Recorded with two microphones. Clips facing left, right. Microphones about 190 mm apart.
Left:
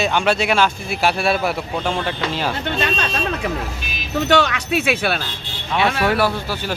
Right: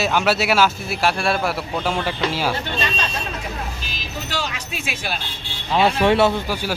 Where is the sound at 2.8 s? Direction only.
60° left (ahead or behind).